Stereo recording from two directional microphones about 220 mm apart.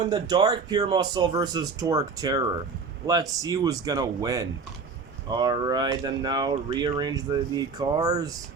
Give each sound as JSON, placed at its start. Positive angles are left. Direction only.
{"t": 0.0, "sound": "speech", "side_deg": -20}